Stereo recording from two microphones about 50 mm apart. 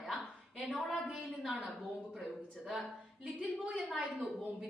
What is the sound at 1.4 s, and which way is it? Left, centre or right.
Speech, centre.